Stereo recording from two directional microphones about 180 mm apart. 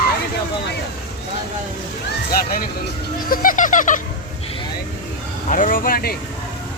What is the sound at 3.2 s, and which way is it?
Music, 50° left (ahead or behind).